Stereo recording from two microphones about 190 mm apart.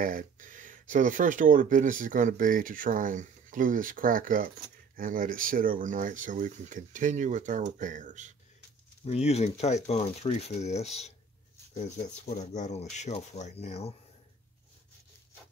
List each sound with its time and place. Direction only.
0.0 s speech: 45° right (ahead or behind)
9.0 s speech: 35° left (ahead or behind)